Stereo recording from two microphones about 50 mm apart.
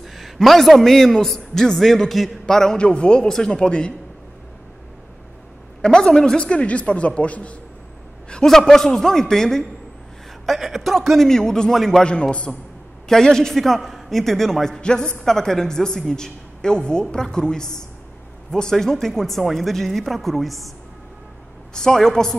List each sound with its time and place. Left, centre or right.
0.0 s a man's voice: centre
5.8 s a man's voice: centre
6.4 s speech: left
8.5 s a man's voice: centre
10.4 s speech: centre
12.0 s speech: left
13.1 s a man's voice: centre
21.7 s a man's voice: centre